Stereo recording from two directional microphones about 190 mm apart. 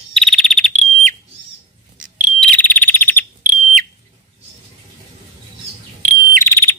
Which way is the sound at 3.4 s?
45° right (ahead or behind).